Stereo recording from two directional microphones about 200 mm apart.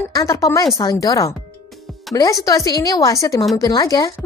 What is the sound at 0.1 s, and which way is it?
A woman's voice, 15° left (ahead or behind).